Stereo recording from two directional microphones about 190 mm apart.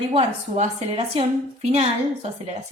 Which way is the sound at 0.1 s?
35° right (ahead or behind).